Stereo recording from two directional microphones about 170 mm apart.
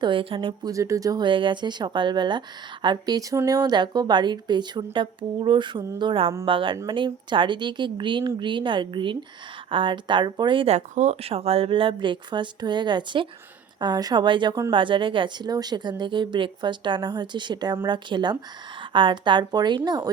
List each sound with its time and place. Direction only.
0.0 s speech: 30° right (ahead or behind)